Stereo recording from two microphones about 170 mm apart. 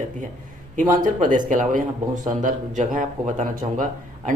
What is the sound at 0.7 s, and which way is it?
Speech, 50° right (ahead or behind).